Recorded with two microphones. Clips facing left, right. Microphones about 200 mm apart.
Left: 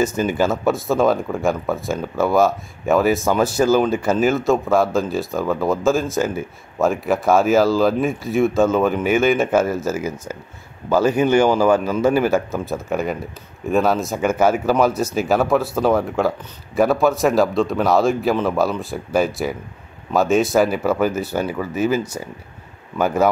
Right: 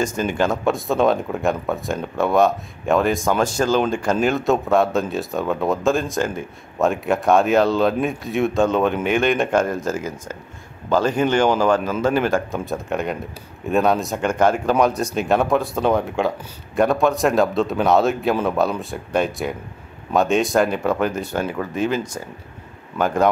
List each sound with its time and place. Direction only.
0.0 s speech: 5° left (ahead or behind)